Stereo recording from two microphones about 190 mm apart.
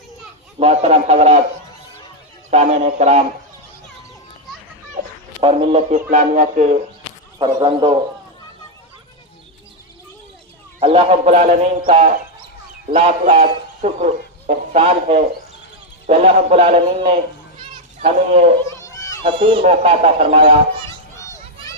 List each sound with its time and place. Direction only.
0.6 s speech: 35° right (ahead or behind)
2.5 s speech: 35° right (ahead or behind)
5.4 s speech: 30° right (ahead or behind)
7.3 s speech: 25° right (ahead or behind)
10.8 s speech: 30° right (ahead or behind)
12.9 s speech: 30° right (ahead or behind)
17.6 s children playing: 30° right (ahead or behind)
18.7 s a sound: 15° left (ahead or behind)
19.2 s speech: 30° right (ahead or behind)
20.8 s children playing: 15° left (ahead or behind)